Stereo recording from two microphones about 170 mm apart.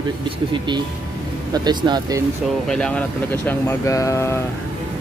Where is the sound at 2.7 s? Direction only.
5° left (ahead or behind).